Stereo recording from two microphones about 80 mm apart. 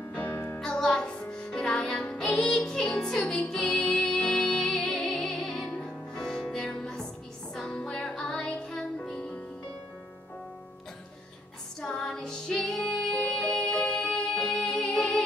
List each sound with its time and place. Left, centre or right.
0.1 s music: centre
0.6 s music: centre
11.8 s music: centre